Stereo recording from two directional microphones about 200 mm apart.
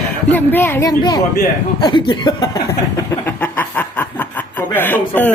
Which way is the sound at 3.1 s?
10° left (ahead or behind).